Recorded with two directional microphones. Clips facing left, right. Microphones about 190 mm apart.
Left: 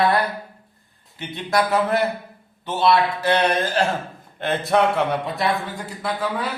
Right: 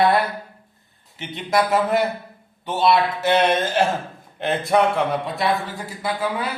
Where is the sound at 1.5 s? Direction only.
20° right (ahead or behind).